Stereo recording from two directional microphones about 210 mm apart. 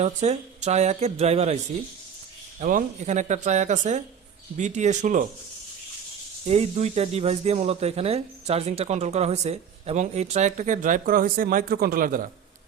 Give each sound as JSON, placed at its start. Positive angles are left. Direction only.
{"t": 0.0, "sound": "speech", "side_deg": -30}
{"t": 2.6, "sound": "speech", "side_deg": -40}
{"t": 6.5, "sound": "speech", "side_deg": -30}